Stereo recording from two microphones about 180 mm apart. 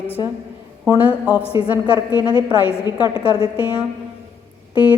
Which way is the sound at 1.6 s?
25° left (ahead or behind).